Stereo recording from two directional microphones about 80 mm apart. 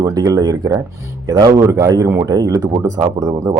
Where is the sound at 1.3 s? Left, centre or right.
Right.